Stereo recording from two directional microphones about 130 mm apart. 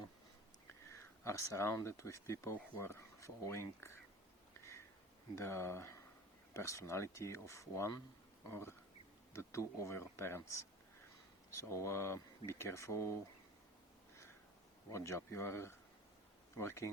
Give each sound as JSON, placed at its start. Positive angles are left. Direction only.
{"t": 1.2, "sound": "speech", "side_deg": 20}
{"t": 5.3, "sound": "speech", "side_deg": 20}
{"t": 14.8, "sound": "speech", "side_deg": 25}